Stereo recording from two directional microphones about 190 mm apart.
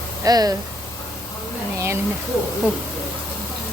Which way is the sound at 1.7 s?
15° right (ahead or behind).